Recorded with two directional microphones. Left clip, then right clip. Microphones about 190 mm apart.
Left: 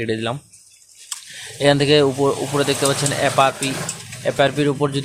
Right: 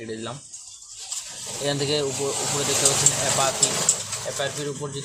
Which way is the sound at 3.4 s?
30° left (ahead or behind).